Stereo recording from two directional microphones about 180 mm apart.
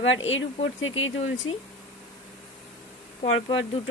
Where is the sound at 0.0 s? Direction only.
90° left.